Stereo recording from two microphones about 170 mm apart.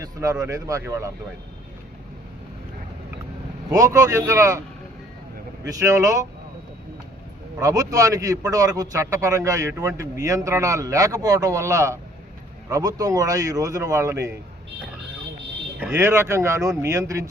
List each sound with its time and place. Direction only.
0.0 s speech: 20° right (ahead or behind)
3.7 s a man's voice: 20° right (ahead or behind)
5.6 s a man's voice: 20° right (ahead or behind)
7.6 s a man's voice: 20° right (ahead or behind)
16.0 s speech: 15° right (ahead or behind)